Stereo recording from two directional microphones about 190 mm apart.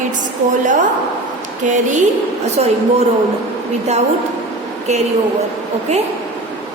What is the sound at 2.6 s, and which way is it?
Speech, 35° right (ahead or behind).